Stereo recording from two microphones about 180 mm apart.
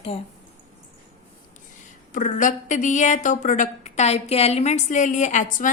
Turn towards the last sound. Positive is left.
turn(degrees=45)  # may be behind; listen again after turning